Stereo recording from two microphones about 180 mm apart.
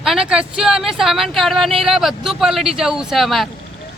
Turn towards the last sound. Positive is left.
turn(degrees=0)  # may be behind; listen again after turning